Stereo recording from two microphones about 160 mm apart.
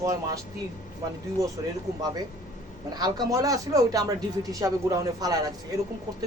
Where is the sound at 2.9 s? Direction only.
25° right (ahead or behind).